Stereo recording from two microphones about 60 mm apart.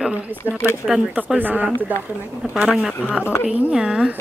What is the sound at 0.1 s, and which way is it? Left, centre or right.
Speech, right.